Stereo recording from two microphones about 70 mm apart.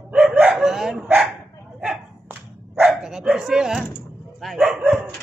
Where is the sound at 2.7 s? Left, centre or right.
Centre.